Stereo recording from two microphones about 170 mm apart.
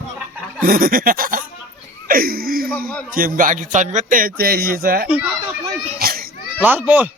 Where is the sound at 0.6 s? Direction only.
55° right (ahead or behind).